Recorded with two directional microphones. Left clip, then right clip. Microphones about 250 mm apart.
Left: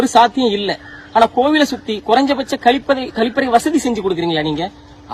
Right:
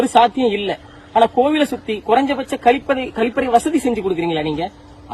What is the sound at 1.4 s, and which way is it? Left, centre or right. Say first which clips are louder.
Speech: left 3 dB; left.